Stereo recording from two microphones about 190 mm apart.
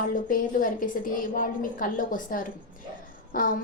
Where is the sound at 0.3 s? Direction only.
45° left (ahead or behind).